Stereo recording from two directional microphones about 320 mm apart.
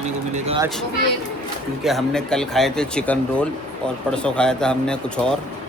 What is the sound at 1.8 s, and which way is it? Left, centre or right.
Speech, centre.